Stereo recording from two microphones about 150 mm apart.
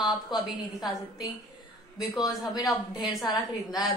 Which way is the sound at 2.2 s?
25° left (ahead or behind).